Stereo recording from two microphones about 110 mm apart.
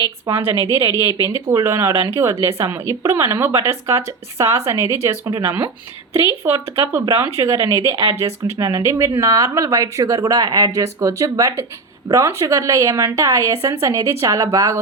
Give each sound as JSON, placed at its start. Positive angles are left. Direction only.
{"t": 0.3, "sound": "speech", "side_deg": -30}